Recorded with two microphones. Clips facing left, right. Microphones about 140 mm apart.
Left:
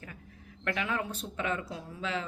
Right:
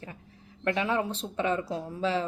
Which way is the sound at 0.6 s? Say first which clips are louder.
Right 5 dB; 30° right (ahead or behind).